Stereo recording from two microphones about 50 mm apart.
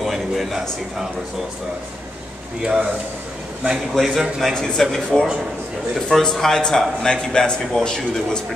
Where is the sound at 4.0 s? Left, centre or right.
Centre.